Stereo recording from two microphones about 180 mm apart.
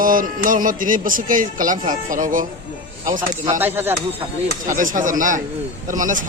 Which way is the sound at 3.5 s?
10° right (ahead or behind).